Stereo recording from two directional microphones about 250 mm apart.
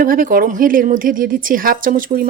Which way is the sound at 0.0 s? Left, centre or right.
Right.